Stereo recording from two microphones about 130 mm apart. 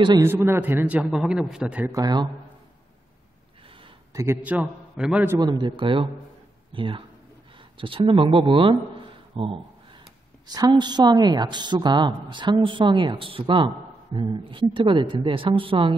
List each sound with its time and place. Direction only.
0.2 s a man's voice: 20° right (ahead or behind)
1.9 s a man's voice: 30° right (ahead or behind)
4.1 s a man's voice: 25° right (ahead or behind)
4.4 s a man's voice: 10° right (ahead or behind)
5.4 s a woman's voice: 35° right (ahead or behind)
8.7 s a sound: 40° right (ahead or behind)
10.5 s a woman's voice: 30° right (ahead or behind)